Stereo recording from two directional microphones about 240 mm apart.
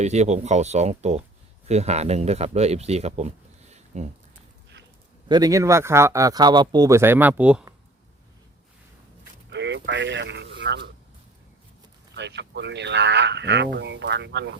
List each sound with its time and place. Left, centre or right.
0.0 s speech: right
5.3 s speech: centre
9.5 s a sound: right
12.1 s speech: right